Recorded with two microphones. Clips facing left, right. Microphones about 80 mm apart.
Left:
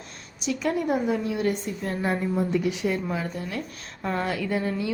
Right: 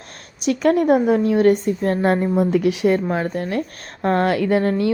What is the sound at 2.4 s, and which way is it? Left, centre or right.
A woman's voice, right.